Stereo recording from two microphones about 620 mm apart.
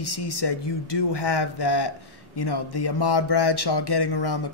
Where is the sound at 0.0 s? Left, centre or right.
Left.